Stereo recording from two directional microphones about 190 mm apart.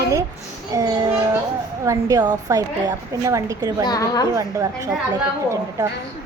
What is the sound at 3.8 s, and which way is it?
Speech, 20° left (ahead or behind).